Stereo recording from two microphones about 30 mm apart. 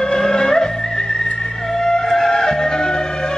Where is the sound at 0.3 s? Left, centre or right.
Centre.